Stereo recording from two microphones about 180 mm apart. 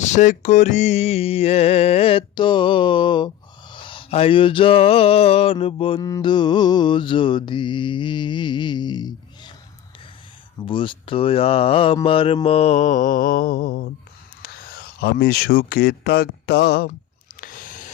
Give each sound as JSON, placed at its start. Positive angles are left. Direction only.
{"t": 0.1, "sound": "mantra", "side_deg": 40}
{"t": 10.6, "sound": "mantra", "side_deg": 30}
{"t": 14.4, "sound": "speech", "side_deg": 55}
{"t": 17.4, "sound": "a sound", "side_deg": 50}